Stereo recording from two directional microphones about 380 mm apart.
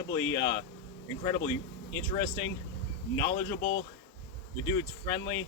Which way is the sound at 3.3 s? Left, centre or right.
Centre.